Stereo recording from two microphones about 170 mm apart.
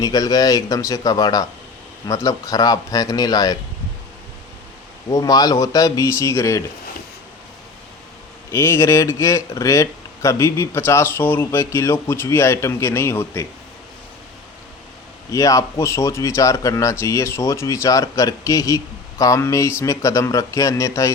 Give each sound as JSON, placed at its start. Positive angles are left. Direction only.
{"t": 0.0, "sound": "speech", "side_deg": 20}
{"t": 5.1, "sound": "speech", "side_deg": 20}
{"t": 8.4, "sound": "speech", "side_deg": 15}
{"t": 15.3, "sound": "speech", "side_deg": 20}